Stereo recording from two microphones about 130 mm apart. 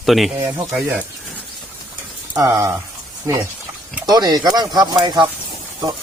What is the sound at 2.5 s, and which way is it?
Speech, 20° right (ahead or behind).